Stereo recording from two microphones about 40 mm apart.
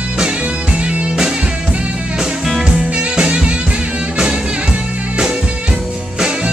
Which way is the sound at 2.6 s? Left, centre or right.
Right.